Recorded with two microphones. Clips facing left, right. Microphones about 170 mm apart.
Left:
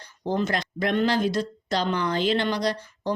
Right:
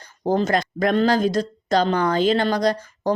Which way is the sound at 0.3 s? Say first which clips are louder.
Right 6 dB; 45° right (ahead or behind).